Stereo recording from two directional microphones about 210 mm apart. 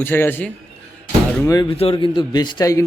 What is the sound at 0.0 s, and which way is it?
A man's voice, 10° left (ahead or behind).